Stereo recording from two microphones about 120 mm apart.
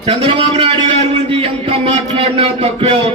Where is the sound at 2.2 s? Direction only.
55° right (ahead or behind).